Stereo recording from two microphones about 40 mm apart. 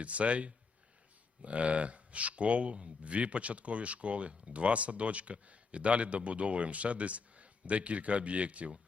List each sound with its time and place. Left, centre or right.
0.0 s speech: right